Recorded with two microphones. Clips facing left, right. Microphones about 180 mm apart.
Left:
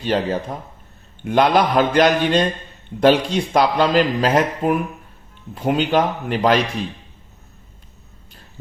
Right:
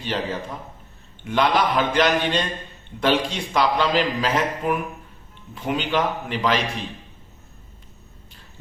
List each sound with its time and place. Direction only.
0.0 s a man's voice: 45° left (ahead or behind)